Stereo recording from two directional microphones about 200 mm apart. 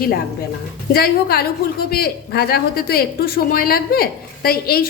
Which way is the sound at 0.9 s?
50° left (ahead or behind).